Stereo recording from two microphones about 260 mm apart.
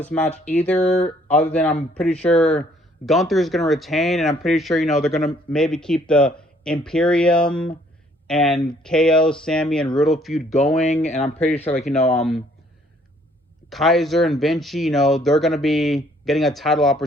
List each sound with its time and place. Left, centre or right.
0.0 s speech: centre
10.5 s speech: left
13.7 s speech: centre